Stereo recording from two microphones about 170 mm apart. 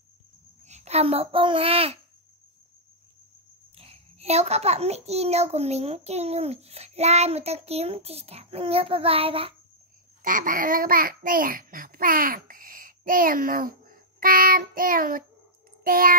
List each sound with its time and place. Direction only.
0.7 s a child's voice: 40° right (ahead or behind)
3.7 s a child's voice: 35° right (ahead or behind)
10.2 s a child's voice: 55° right (ahead or behind)